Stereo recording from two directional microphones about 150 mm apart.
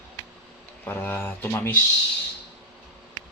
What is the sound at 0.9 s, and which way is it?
Speech, 10° left (ahead or behind).